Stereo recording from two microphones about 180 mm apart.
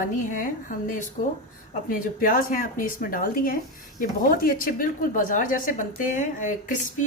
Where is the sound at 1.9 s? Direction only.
50° left (ahead or behind).